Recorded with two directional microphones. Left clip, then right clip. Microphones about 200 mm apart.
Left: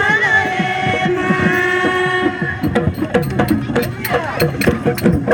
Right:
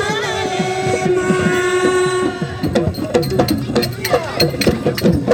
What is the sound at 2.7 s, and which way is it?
Music, centre (ahead or behind).